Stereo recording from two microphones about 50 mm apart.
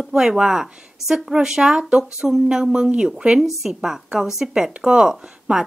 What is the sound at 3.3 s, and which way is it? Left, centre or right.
Speech, centre.